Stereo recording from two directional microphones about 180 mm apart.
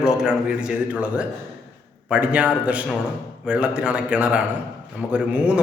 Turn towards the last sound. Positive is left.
turn(degrees=-5)  # may be behind; listen again after turning